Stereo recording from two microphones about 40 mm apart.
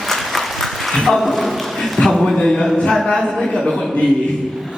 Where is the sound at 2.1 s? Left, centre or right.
Centre.